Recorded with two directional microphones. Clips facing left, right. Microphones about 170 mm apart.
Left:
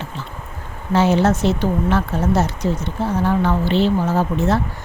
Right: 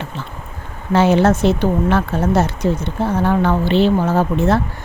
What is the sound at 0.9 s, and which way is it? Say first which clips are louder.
A woman's voice: right 3 dB; 60° right (ahead or behind).